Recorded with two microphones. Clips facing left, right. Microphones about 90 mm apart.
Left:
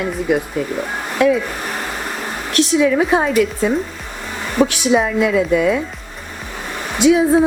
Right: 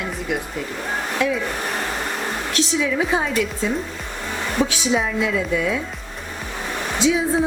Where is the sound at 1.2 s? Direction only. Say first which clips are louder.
Left 8 dB; 55° left (ahead or behind).